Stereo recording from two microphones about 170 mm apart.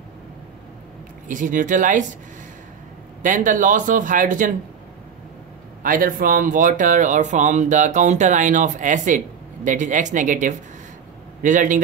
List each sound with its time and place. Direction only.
1.3 s speech: 50° right (ahead or behind)
3.2 s speech: 50° right (ahead or behind)
5.8 s speech: 55° right (ahead or behind)